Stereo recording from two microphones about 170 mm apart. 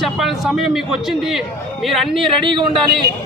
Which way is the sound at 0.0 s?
Centre (ahead or behind).